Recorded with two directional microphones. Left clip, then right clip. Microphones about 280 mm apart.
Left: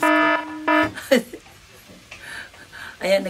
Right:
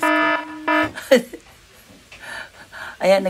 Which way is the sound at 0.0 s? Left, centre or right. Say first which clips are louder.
Even; centre.